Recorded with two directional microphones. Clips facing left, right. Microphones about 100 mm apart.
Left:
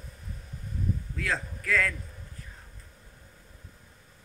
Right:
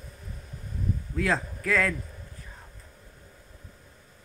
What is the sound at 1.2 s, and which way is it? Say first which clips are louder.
Speech: right 8 dB; 20° right (ahead or behind).